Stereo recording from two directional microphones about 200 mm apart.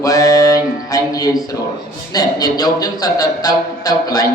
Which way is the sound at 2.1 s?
20° left (ahead or behind).